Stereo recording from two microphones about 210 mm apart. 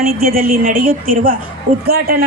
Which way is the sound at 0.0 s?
45° right (ahead or behind).